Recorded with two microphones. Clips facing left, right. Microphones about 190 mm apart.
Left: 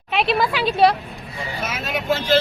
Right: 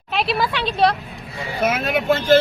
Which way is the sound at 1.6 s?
55° right (ahead or behind).